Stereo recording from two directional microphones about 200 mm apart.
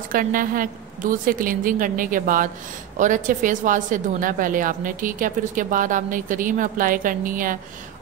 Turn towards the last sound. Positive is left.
turn(degrees=-45)  # may be behind; listen again after turning